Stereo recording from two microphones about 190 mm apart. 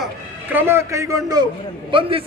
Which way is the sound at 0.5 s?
10° right (ahead or behind).